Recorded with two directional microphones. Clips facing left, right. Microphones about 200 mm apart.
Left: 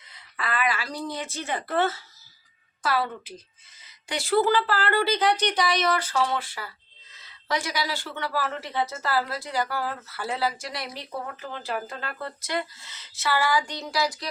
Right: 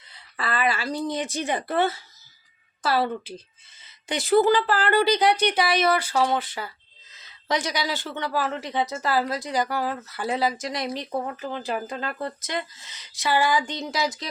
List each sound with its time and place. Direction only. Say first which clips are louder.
0.1 s a woman's voice: right 2 dB; 30° right (ahead or behind); by 2.0 s 15° right (ahead or behind)
2.8 s a woman's voice: right 3 dB; 30° right (ahead or behind)